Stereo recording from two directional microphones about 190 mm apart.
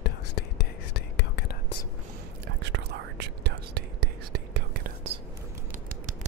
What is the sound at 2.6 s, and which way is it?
Whispering, 65° right (ahead or behind).